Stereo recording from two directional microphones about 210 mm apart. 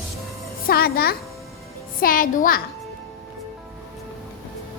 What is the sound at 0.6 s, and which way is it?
A child's voice, 45° left (ahead or behind).